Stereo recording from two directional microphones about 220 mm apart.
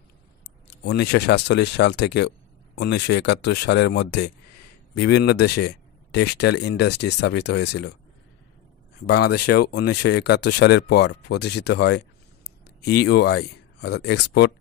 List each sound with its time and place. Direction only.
0.8 s speech: 50° left (ahead or behind)
9.0 s speech: 50° left (ahead or behind)